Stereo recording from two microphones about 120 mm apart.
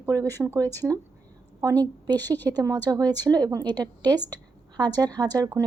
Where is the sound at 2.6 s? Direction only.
30° right (ahead or behind).